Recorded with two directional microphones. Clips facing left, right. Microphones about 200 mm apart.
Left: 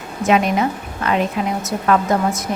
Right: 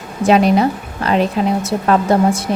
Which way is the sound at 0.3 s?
35° right (ahead or behind).